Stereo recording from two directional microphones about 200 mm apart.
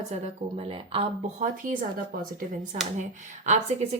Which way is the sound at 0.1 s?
30° right (ahead or behind).